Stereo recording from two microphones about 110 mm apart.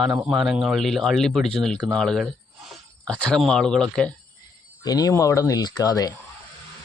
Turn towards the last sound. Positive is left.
turn(degrees=35)  # may be behind; listen again after turning